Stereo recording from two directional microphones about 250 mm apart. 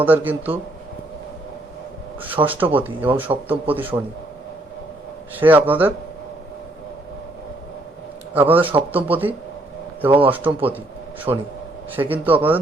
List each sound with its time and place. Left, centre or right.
0.0 s speech: centre
2.2 s speech: centre
5.3 s speech: centre
8.3 s speech: centre
11.3 s a man's voice: centre
11.9 s speech: centre